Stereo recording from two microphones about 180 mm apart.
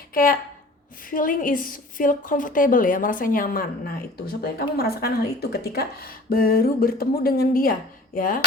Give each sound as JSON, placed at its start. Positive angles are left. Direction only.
{"t": 0.1, "sound": "a woman's voice", "side_deg": 50}